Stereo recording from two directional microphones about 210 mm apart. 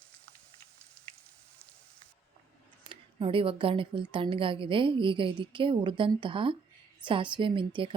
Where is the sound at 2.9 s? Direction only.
25° right (ahead or behind).